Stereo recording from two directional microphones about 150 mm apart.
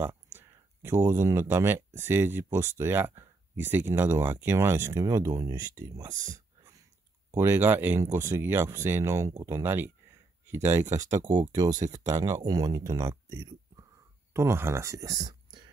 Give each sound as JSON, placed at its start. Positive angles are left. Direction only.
{"t": 0.0, "sound": "speech", "side_deg": -15}
{"t": 6.0, "sound": "speech", "side_deg": -55}
{"t": 6.3, "sound": "a sound", "side_deg": -20}
{"t": 7.3, "sound": "speech", "side_deg": -15}